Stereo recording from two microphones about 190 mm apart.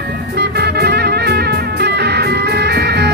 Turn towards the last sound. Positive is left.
turn(degrees=-60)  # may be behind; listen again after turning